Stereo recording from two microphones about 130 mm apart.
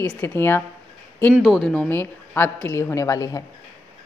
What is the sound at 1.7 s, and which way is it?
Speech, 15° left (ahead or behind).